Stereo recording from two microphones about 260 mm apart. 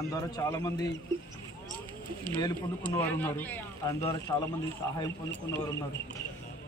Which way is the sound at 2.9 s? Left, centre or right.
Centre.